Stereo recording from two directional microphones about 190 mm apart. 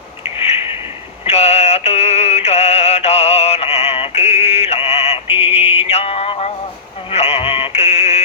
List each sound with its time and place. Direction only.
1.2 s music: 35° left (ahead or behind)
7.1 s synthetic singing: 30° left (ahead or behind)